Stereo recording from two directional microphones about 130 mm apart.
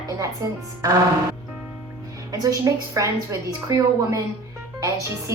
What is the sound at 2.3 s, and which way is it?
Speech, 25° right (ahead or behind).